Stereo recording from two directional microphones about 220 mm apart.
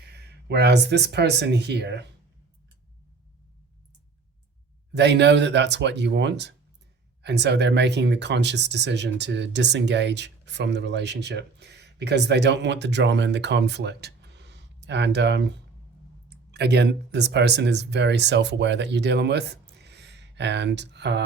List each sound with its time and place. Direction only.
0.0 s speech: 50° right (ahead or behind)
4.9 s speech: 50° right (ahead or behind)